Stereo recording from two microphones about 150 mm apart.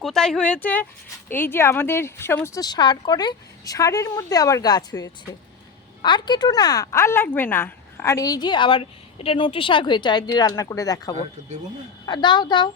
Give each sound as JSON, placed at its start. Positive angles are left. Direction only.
{"t": 0.0, "sound": "speech", "side_deg": 5}